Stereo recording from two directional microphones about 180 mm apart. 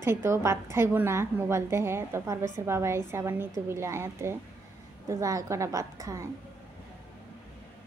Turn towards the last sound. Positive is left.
turn(degrees=-15)  # may be behind; listen again after turning